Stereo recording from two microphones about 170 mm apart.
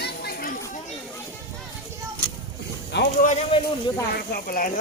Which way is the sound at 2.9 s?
90° left.